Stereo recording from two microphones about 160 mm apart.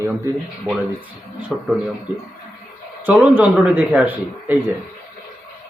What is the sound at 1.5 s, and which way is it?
Speech, centre (ahead or behind).